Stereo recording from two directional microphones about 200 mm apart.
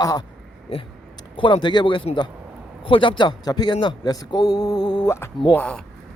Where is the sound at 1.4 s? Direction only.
25° left (ahead or behind); by 5.8 s 5° left (ahead or behind).